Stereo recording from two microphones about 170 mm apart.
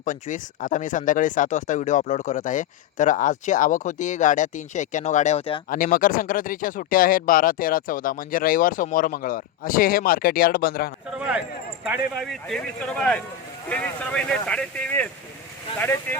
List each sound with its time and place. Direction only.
0.0 s speech: 50° left (ahead or behind)
5.6 s speech: 55° left (ahead or behind)
11.9 s speech: centre (ahead or behind)